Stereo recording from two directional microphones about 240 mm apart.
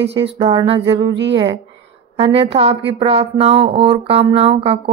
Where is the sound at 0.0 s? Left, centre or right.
Right.